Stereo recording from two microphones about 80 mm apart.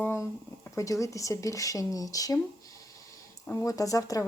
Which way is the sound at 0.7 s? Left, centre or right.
Left.